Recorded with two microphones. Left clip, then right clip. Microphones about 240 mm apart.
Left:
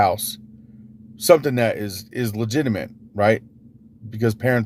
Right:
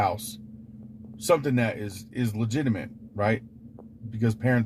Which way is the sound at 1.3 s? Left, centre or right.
Left.